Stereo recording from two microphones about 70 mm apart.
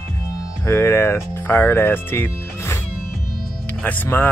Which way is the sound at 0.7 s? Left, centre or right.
Left.